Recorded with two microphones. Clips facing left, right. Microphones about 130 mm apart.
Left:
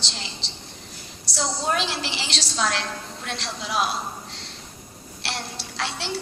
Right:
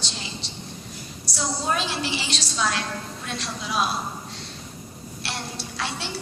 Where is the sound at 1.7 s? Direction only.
85° left.